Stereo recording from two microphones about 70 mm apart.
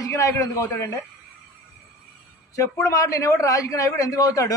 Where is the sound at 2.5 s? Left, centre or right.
Left.